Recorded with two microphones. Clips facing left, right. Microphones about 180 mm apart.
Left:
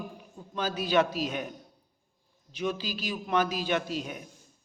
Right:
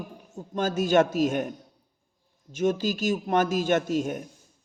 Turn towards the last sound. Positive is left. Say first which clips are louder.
# right 8 dB
turn(degrees=-50)  # may be behind; listen again after turning